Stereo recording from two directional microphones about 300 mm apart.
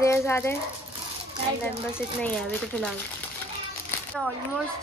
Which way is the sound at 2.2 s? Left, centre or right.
Centre.